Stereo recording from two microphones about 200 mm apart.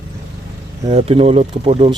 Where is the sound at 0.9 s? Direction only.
30° right (ahead or behind).